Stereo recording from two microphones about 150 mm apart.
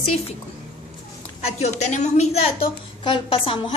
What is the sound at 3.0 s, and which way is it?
Speech, 35° left (ahead or behind).